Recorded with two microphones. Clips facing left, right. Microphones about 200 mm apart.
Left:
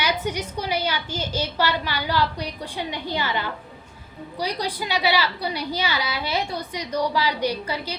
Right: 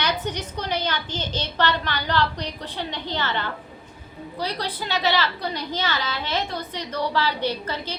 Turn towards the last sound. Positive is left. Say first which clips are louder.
# left 1 dB
turn(degrees=10)  # may be behind; listen again after turning